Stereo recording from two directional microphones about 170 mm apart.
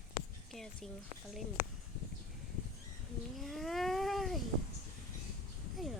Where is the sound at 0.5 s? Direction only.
Centre (ahead or behind).